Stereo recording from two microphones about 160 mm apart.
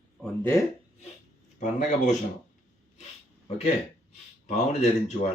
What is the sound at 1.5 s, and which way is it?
Speech, 50° left (ahead or behind).